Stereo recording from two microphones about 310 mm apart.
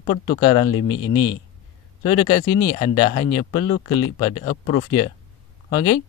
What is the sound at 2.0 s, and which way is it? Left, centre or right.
Speech, centre.